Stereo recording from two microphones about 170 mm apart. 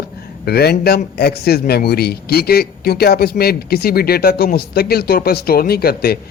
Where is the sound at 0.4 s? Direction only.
70° left (ahead or behind).